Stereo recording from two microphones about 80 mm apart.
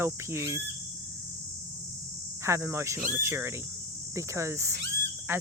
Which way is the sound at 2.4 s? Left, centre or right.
Right.